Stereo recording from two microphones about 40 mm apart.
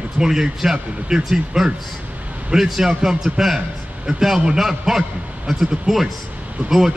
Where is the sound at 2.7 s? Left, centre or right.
Centre.